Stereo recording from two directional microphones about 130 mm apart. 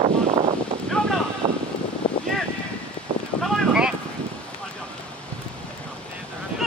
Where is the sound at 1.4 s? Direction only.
40° right (ahead or behind).